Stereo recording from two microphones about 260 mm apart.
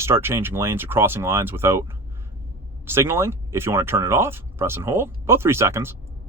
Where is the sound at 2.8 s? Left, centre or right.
Centre.